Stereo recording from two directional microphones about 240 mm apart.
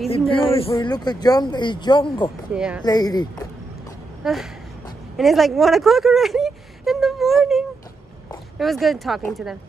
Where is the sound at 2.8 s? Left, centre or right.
Centre.